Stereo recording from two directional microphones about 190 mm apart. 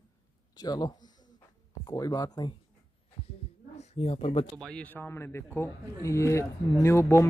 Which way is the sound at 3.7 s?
35° left (ahead or behind).